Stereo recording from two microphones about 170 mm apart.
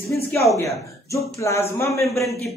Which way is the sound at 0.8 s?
20° left (ahead or behind).